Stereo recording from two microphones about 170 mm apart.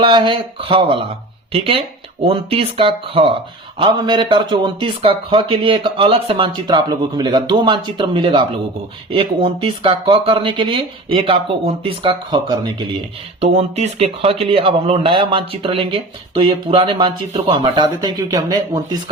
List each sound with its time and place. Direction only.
0.0 s speech: 30° right (ahead or behind)
13.4 s speech: 40° right (ahead or behind); by 19.1 s 25° right (ahead or behind)